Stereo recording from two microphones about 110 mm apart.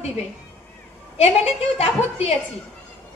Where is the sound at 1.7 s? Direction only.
70° left (ahead or behind).